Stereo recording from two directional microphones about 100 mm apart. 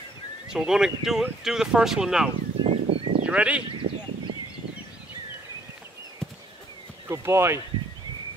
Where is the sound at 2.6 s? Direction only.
70° right (ahead or behind).